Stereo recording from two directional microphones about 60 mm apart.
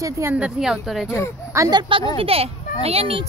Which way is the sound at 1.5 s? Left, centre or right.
Right.